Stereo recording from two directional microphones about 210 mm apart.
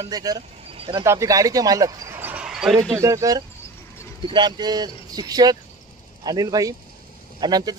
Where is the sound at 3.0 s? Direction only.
15° right (ahead or behind).